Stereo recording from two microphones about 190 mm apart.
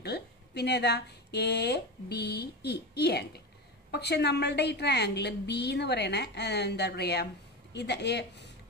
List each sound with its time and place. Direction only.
0.0 s a woman's voice: 60° left (ahead or behind)